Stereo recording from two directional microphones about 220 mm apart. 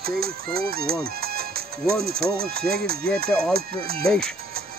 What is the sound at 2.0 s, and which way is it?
Speech, 45° right (ahead or behind).